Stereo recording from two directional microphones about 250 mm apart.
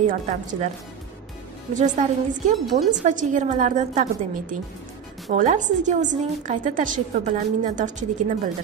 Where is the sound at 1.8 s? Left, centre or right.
Right.